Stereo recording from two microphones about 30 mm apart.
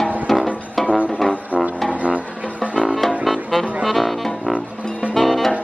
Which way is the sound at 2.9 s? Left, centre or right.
Centre.